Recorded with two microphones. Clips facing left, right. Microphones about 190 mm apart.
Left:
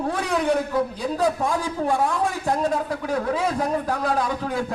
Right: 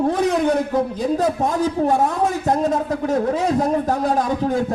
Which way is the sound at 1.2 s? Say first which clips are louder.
Left 2 dB; 20° right (ahead or behind).